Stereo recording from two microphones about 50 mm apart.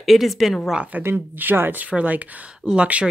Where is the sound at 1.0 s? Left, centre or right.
Right.